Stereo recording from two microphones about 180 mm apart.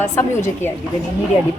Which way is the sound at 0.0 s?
15° left (ahead or behind).